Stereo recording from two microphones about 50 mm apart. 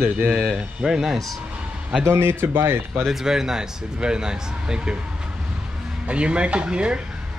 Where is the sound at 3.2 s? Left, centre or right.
Centre.